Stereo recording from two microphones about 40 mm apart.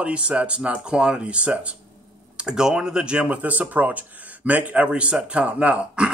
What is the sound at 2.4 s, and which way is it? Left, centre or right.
Speech, centre.